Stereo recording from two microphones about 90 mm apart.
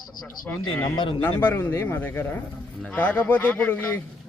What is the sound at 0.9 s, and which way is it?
Speech, 65° left (ahead or behind).